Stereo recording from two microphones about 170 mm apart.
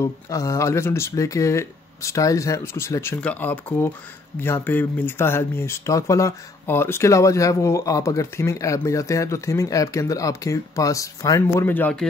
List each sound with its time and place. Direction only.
0.0 s speech: 20° left (ahead or behind)